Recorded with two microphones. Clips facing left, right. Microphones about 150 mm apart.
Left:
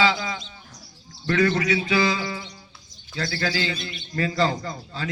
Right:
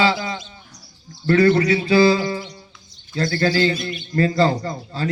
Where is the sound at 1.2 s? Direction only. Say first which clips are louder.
Right 6 dB; 35° right (ahead or behind).